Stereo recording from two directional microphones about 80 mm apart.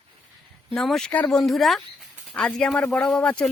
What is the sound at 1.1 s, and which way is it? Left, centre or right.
Speech, centre.